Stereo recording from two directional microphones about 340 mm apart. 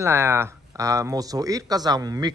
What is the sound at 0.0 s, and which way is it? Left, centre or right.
A man's voice, centre.